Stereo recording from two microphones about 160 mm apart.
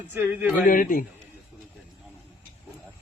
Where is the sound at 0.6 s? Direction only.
60° left (ahead or behind).